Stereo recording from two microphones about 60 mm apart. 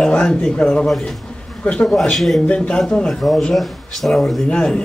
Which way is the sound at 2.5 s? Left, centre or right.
Centre.